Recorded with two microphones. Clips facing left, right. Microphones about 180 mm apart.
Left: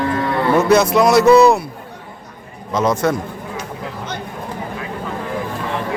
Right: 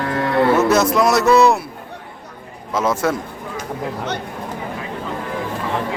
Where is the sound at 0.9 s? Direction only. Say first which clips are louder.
Left 4 dB; centre (ahead or behind).